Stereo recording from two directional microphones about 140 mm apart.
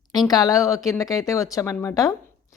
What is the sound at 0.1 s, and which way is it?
Speech, 30° left (ahead or behind).